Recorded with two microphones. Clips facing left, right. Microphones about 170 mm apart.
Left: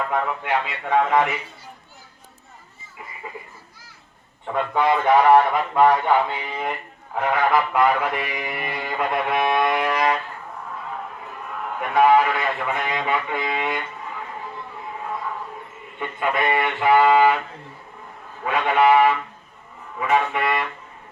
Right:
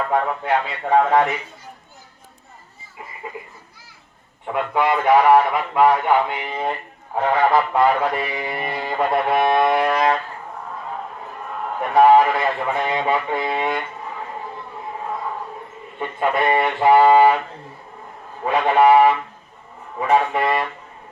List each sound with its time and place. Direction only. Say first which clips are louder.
0.1 s speech: right 3 dB; 35° right (ahead or behind)
4.4 s a man's voice: right 1 dB; 10° right (ahead or behind)
6.5 s speech: right 3 dB; 30° right (ahead or behind)
11.8 s speech: right 4 dB; 35° right (ahead or behind)
16.0 s speech: right 3 dB; 35° right (ahead or behind)
18.4 s speech: right 3 dB; 35° right (ahead or behind)